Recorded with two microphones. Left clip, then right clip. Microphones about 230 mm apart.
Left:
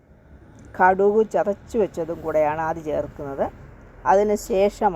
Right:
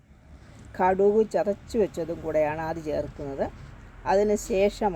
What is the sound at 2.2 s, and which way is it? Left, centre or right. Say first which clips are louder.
Speech: left 5 dB; centre.